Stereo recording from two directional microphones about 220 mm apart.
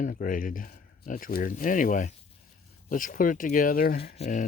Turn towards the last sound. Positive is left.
turn(degrees=30)  # may be behind; listen again after turning